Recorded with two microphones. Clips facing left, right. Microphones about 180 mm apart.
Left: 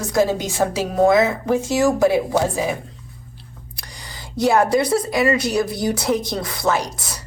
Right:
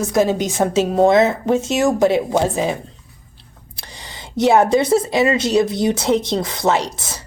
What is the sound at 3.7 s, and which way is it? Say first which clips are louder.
Speech: right 3 dB; 25° right (ahead or behind).